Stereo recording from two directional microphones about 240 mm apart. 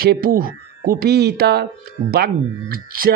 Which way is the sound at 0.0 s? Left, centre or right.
Right.